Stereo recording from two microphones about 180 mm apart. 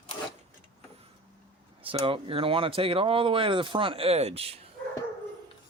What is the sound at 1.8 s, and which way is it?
Speech, 30° right (ahead or behind).